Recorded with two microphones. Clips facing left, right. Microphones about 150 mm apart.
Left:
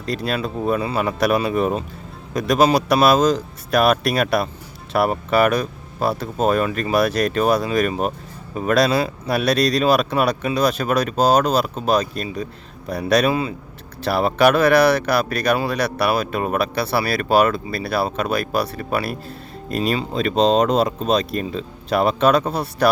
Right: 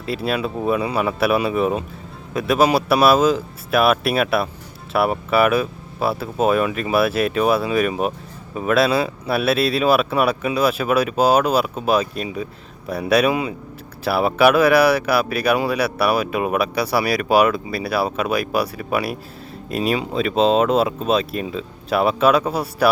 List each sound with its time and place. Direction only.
0.0 s speech: 5° right (ahead or behind)